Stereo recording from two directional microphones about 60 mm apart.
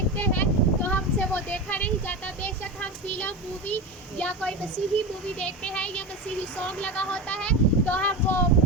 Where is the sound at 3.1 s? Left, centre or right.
Left.